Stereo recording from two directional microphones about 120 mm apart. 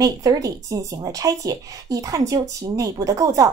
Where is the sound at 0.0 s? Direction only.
30° right (ahead or behind).